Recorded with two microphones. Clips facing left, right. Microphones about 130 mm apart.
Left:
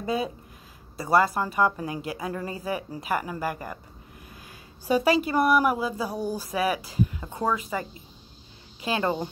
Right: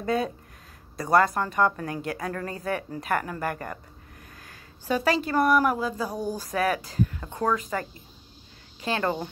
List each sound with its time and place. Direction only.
0.0 s speech: 5° left (ahead or behind)
8.8 s speech: 15° left (ahead or behind)